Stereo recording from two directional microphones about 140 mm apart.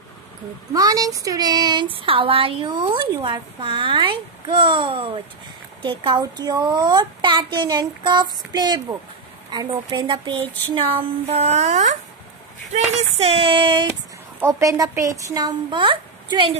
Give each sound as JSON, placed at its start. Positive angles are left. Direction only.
{"t": 0.7, "sound": "a woman's voice", "side_deg": -25}
{"t": 12.7, "sound": "a woman's voice", "side_deg": -45}
{"t": 14.4, "sound": "speech", "side_deg": -25}